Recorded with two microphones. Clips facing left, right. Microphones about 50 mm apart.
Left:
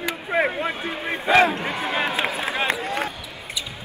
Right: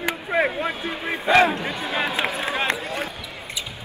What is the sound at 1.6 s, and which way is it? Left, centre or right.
Speech, left.